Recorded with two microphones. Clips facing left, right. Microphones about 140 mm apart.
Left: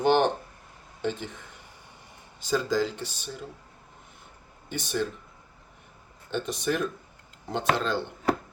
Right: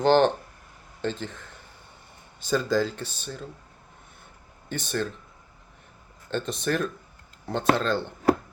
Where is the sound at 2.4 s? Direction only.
15° left (ahead or behind).